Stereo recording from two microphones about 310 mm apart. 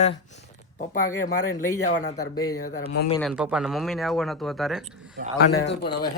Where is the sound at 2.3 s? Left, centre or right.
Centre.